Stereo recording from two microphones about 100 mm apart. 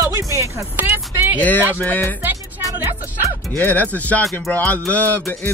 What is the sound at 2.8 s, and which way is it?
Speech, 25° right (ahead or behind).